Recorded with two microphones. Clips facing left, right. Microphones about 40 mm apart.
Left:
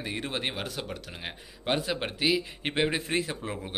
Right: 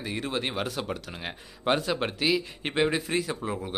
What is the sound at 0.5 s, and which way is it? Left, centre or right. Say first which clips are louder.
Speech: right 4 dB; centre.